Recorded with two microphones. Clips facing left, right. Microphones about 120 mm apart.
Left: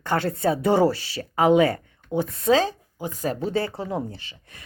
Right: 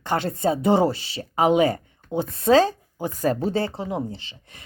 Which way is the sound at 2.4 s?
40° right (ahead or behind).